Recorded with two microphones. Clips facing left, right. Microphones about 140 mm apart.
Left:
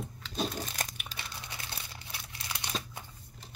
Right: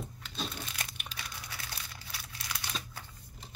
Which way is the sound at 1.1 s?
25° left (ahead or behind).